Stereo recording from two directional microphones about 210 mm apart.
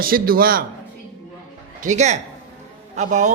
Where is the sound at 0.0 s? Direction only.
45° right (ahead or behind).